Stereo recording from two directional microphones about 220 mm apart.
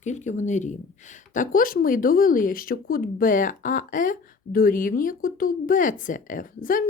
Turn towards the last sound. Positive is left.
turn(degrees=40)  # may be behind; listen again after turning